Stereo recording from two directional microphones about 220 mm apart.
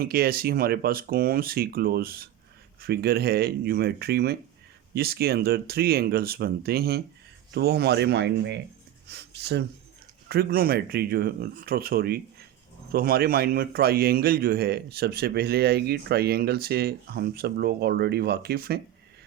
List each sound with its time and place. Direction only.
0.0 s a man's voice: 45° right (ahead or behind)